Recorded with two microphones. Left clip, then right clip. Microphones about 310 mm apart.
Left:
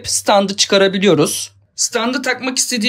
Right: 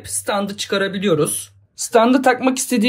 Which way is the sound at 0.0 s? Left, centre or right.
Centre.